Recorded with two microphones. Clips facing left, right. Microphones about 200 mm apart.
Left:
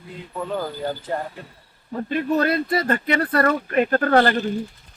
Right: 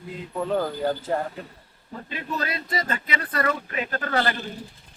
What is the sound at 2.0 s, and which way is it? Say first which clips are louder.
Speech: left 10 dB; 55° left (ahead or behind).